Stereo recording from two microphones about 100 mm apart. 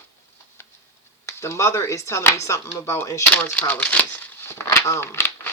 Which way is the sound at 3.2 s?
15° left (ahead or behind).